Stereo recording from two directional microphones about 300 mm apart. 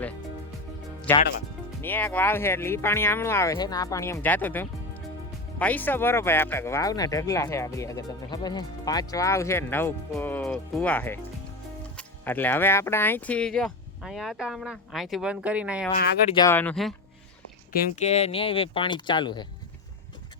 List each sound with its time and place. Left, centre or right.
1.1 s speech: centre
16.3 s speech: centre
17.7 s speech: left